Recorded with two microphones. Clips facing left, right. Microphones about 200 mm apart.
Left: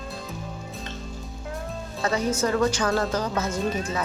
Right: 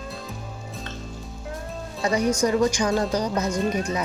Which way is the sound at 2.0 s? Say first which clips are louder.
Right 3 dB; 15° right (ahead or behind).